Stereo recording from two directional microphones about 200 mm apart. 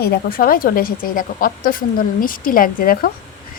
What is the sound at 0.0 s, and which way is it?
A woman's voice, 50° left (ahead or behind).